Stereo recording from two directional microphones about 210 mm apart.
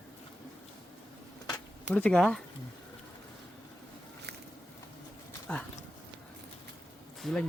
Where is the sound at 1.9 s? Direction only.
5° left (ahead or behind).